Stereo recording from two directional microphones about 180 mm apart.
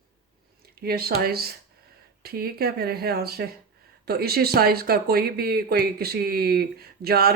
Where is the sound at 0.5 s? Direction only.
60° right (ahead or behind).